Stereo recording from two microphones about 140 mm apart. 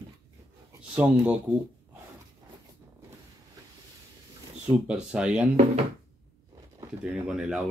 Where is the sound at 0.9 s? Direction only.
10° right (ahead or behind).